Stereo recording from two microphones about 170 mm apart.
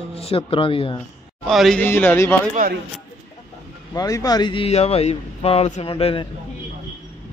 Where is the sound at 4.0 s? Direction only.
20° left (ahead or behind).